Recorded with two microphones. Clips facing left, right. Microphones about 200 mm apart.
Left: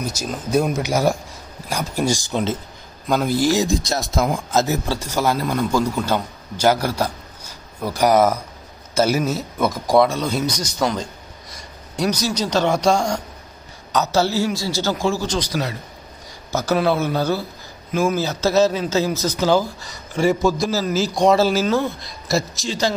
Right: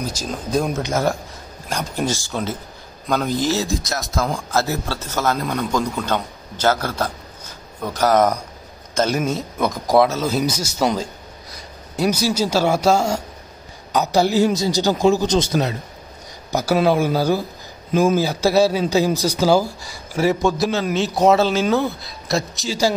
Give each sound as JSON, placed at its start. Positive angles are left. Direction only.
{"t": 0.3, "sound": "speech", "side_deg": 5}
{"t": 3.9, "sound": "a man's voice", "side_deg": 25}
{"t": 11.5, "sound": "a man's voice", "side_deg": -5}